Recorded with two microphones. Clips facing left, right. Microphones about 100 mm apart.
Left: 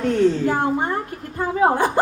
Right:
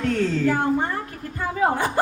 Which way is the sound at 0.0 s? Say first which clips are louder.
Left 4 dB; 20° left (ahead or behind).